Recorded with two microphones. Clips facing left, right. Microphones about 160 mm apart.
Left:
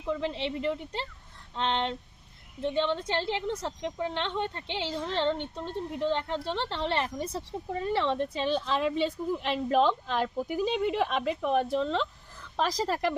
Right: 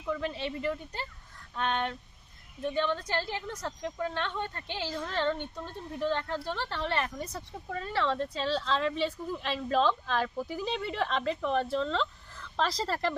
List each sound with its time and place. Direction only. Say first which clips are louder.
0.0 s a woman's voice: left 2 dB; 25° left (ahead or behind)